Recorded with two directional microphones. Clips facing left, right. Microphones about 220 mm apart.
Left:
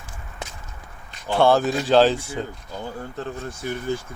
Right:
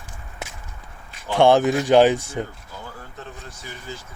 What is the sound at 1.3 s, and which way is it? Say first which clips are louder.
Speech: right 2 dB; 15° right (ahead or behind).